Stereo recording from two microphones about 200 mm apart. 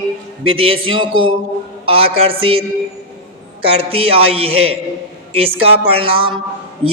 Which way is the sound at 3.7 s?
30° right (ahead or behind).